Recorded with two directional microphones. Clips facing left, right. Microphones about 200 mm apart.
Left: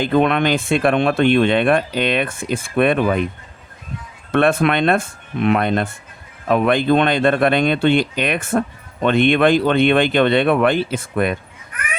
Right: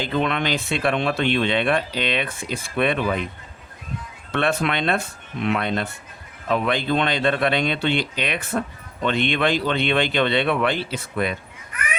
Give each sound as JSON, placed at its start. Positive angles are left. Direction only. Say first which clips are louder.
{"t": 0.0, "sound": "speech", "louder": "left 7 dB", "side_deg": 55}
{"t": 4.3, "sound": "speech", "louder": "left 7 dB", "side_deg": 50}